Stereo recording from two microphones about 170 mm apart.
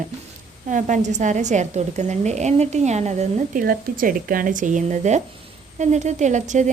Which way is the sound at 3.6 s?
55° right (ahead or behind).